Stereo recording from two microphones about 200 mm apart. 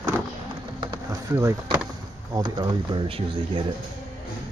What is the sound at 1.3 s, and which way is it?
Speech, 15° right (ahead or behind).